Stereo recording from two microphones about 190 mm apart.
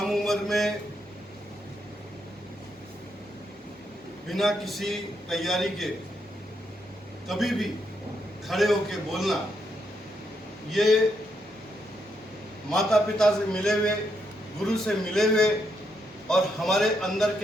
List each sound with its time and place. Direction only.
0.0 s mantra: centre (ahead or behind)
4.3 s a man's voice: centre (ahead or behind)
7.3 s a man's voice: centre (ahead or behind)
10.7 s a man's voice: centre (ahead or behind)
12.7 s a man's voice: centre (ahead or behind)